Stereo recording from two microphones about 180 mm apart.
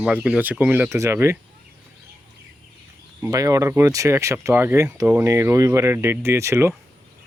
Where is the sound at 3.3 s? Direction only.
20° right (ahead or behind).